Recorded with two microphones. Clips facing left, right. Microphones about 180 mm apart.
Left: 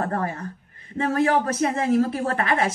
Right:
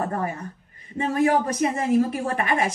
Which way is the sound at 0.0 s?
15° right (ahead or behind).